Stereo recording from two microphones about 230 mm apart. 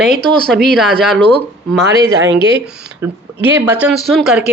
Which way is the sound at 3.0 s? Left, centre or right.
Centre.